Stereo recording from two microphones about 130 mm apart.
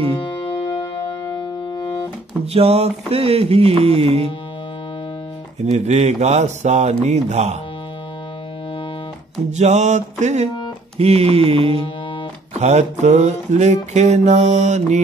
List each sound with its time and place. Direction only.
0.1 s music: 35° left (ahead or behind)
2.5 s music: 55° right (ahead or behind)
5.6 s mantra: 60° right (ahead or behind)
9.5 s mantra: 60° right (ahead or behind)
11.0 s music: 50° right (ahead or behind)
12.5 s mantra: 60° right (ahead or behind)